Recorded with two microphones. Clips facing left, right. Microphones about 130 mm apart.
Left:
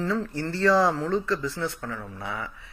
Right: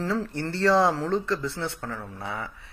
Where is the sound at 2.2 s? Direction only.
25° right (ahead or behind).